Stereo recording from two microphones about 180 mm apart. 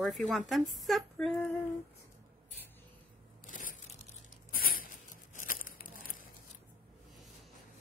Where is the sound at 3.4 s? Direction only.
45° left (ahead or behind).